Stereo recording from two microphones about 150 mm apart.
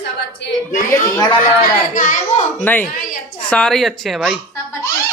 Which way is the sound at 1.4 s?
65° left (ahead or behind).